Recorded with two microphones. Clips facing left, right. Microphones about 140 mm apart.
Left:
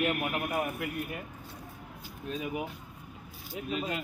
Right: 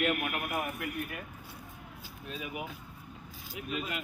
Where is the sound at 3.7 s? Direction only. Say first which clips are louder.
Left 3 dB; 30° left (ahead or behind).